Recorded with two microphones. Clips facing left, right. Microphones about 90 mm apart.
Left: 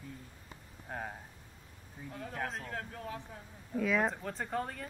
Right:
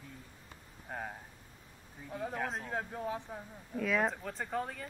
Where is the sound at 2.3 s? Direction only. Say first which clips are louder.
Left 1 dB; 5° right (ahead or behind).